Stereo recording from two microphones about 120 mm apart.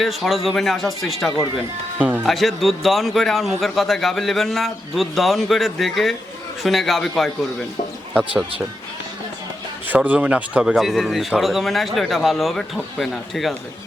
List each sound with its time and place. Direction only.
0.0 s a man's voice: centre (ahead or behind)
2.0 s music: 15° right (ahead or behind)
2.2 s a man's voice: centre (ahead or behind)
8.1 s speech: 10° right (ahead or behind)
9.9 s a man's voice: 15° right (ahead or behind)